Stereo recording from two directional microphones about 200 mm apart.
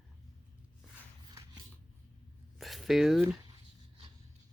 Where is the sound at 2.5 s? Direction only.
Centre (ahead or behind).